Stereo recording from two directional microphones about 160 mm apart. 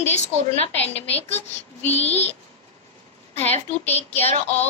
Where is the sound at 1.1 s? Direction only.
40° left (ahead or behind).